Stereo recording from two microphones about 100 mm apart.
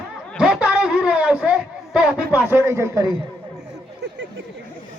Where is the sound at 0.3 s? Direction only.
10° right (ahead or behind).